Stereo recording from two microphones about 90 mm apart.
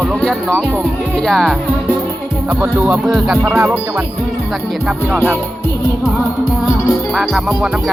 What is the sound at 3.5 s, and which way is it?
Speech, 30° right (ahead or behind).